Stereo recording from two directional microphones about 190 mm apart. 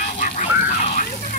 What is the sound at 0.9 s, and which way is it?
Water, 45° left (ahead or behind).